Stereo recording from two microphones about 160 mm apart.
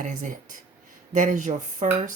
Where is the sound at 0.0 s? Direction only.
50° right (ahead or behind).